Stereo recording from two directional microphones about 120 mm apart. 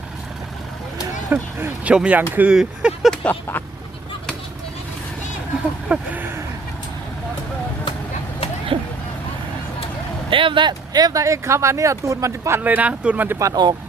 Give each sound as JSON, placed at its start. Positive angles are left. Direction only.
{"t": 1.3, "sound": "speech", "side_deg": -15}
{"t": 3.2, "sound": "speech", "side_deg": 15}
{"t": 5.9, "sound": "speech", "side_deg": -15}
{"t": 8.7, "sound": "a sound", "side_deg": -45}
{"t": 10.2, "sound": "speech", "side_deg": -45}
{"t": 13.5, "sound": "speech", "side_deg": -35}